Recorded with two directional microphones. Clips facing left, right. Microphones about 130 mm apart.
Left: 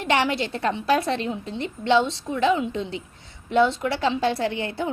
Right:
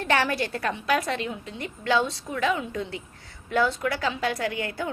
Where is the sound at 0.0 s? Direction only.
20° left (ahead or behind).